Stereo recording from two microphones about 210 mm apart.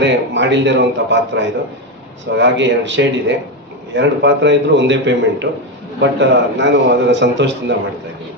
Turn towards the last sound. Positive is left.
turn(degrees=-60)  # may be behind; listen again after turning